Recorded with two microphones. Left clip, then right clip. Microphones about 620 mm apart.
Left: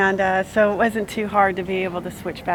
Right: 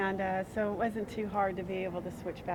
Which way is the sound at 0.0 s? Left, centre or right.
Left.